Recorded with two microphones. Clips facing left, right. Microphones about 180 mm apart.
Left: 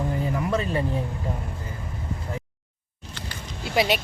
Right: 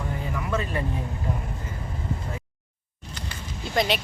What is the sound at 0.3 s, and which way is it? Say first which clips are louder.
Vehicle: left 1 dB; 30° left (ahead or behind).